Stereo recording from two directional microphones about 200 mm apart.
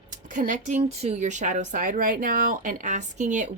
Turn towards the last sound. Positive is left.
turn(degrees=-35)  # may be behind; listen again after turning